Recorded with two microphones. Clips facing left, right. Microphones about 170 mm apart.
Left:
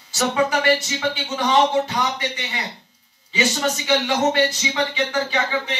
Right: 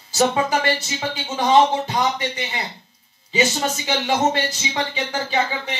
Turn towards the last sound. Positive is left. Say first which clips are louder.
# even
turn(degrees=-30)  # may be behind; listen again after turning